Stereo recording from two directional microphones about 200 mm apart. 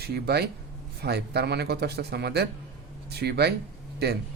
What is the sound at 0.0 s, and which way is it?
Speech, 55° right (ahead or behind).